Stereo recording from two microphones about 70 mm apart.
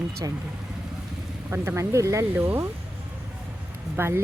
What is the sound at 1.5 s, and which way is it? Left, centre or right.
Speech, right.